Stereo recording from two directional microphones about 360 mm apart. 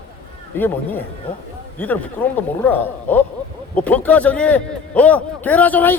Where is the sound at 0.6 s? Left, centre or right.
Centre.